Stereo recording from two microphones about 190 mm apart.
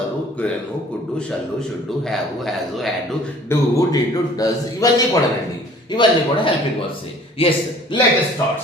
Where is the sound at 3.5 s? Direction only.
20° left (ahead or behind).